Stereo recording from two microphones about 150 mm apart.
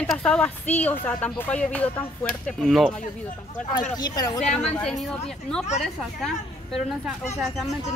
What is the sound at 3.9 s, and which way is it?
Speech, 25° left (ahead or behind).